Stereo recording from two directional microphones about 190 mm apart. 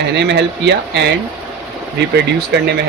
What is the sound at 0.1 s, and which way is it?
Speech, 65° right (ahead or behind).